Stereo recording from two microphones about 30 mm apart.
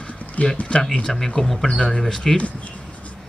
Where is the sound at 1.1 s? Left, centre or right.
Centre.